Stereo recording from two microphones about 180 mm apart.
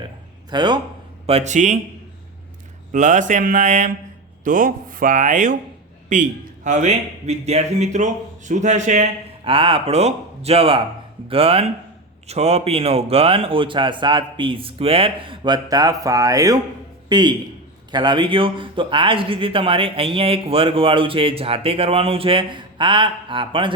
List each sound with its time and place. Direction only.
0.5 s speech: 25° right (ahead or behind)
1.3 s speech: 40° right (ahead or behind)
2.9 s a man's voice: 45° right (ahead or behind); by 23.7 s 30° right (ahead or behind)